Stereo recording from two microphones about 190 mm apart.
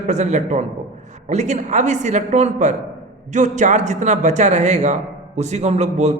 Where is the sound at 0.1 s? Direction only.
35° right (ahead or behind).